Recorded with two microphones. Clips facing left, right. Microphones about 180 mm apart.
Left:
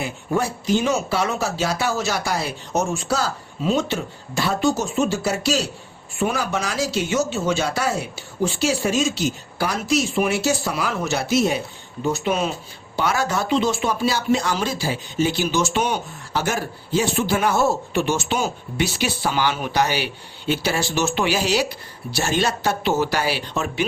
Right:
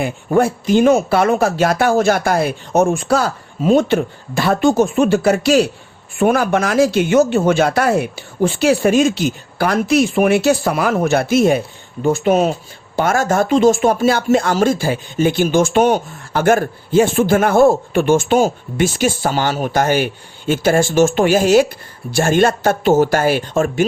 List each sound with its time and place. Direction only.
0.0 s speech: 55° right (ahead or behind)